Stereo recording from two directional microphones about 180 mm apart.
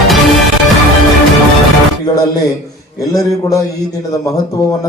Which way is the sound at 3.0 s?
20° left (ahead or behind).